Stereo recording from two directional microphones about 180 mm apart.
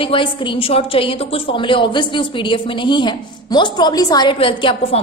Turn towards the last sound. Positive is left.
turn(degrees=30)  # may be behind; listen again after turning